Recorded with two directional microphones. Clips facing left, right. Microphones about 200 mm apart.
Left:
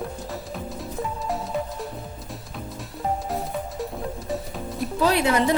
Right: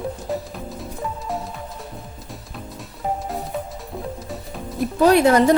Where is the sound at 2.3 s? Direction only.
Centre (ahead or behind).